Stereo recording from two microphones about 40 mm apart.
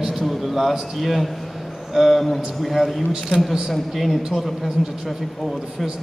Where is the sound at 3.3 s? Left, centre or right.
Centre.